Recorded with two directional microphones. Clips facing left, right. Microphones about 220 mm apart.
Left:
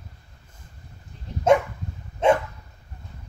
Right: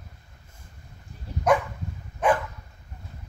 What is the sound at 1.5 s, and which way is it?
Dog, 25° left (ahead or behind).